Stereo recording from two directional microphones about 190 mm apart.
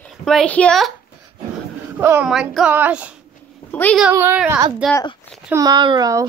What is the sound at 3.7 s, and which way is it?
Speech, 5° left (ahead or behind).